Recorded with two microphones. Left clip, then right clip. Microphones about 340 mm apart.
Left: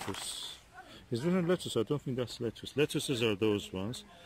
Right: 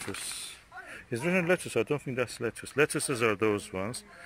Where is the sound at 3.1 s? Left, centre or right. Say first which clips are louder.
Right 3 dB; centre.